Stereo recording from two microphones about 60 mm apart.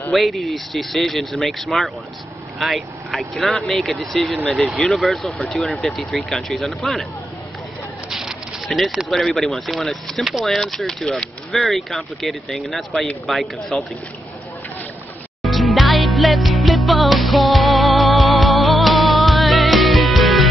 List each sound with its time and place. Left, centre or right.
0.1 s speech: centre
8.1 s a sound: centre
8.6 s speech: centre
15.4 s music: centre